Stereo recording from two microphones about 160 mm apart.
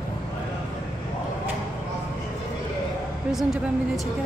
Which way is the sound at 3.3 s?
Centre (ahead or behind).